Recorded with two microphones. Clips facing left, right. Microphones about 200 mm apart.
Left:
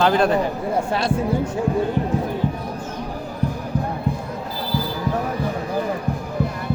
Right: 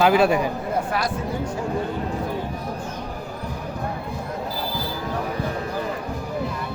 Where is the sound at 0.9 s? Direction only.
25° left (ahead or behind).